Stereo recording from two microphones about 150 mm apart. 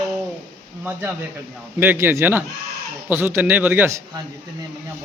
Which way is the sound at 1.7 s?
15° right (ahead or behind).